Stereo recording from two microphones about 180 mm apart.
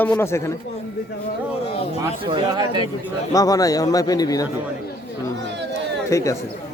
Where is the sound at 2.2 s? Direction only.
30° right (ahead or behind).